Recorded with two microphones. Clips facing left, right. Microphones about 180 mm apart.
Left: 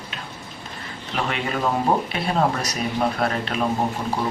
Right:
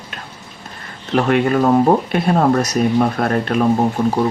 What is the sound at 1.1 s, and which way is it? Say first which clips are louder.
Speech: right 11 dB; 50° right (ahead or behind).